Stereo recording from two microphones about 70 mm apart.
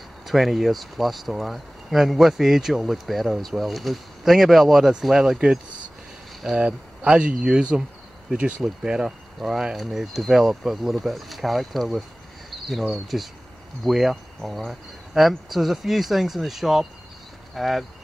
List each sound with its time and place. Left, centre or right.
0.3 s speech: centre
12.4 s cricket: centre
12.8 s speech: centre